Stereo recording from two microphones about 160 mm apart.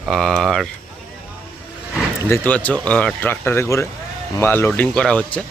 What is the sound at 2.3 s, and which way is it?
Speech, 10° left (ahead or behind).